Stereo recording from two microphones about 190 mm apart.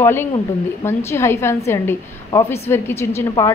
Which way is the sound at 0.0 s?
10° left (ahead or behind).